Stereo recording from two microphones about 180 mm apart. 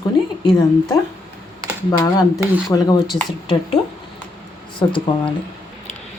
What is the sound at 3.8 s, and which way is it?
A woman's voice, 25° left (ahead or behind).